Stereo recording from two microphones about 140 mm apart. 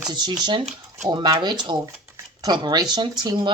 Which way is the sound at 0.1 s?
30° right (ahead or behind).